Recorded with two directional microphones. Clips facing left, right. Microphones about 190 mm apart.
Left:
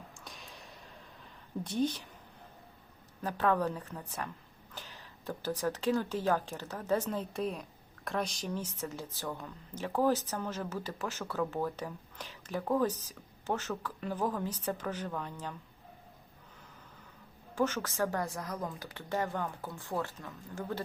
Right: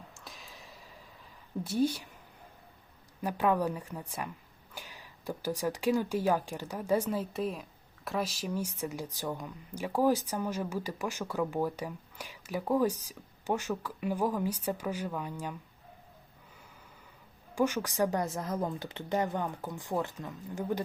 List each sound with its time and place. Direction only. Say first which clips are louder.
0.3 s a sound: right 1 dB; centre (ahead or behind)
1.6 s speech: right 3 dB; 10° right (ahead or behind)
3.2 s speech: right 1 dB; 10° right (ahead or behind)
17.5 s speech: right 2 dB; 10° right (ahead or behind)